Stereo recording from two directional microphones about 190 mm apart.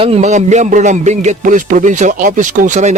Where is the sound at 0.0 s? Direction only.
40° right (ahead or behind).